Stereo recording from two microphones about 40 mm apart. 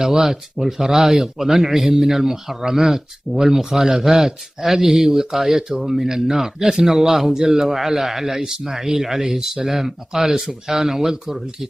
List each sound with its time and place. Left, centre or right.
0.0 s speech: centre